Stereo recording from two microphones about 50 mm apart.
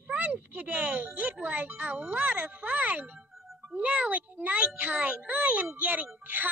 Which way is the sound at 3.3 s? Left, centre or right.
Centre.